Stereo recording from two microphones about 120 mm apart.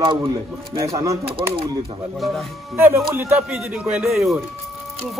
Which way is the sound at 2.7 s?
15° right (ahead or behind).